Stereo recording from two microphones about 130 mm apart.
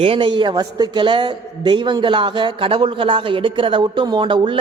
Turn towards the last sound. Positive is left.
turn(degrees=-40)  # may be behind; listen again after turning